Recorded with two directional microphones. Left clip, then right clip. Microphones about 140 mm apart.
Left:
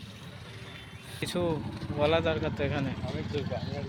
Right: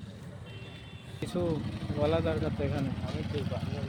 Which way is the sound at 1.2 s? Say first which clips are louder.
Left 2 dB; centre (ahead or behind).